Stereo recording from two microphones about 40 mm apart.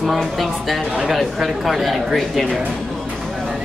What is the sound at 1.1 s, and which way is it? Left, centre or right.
A man's voice, centre.